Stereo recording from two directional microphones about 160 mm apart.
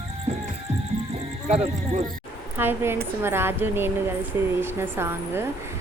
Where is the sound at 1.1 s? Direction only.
45° right (ahead or behind).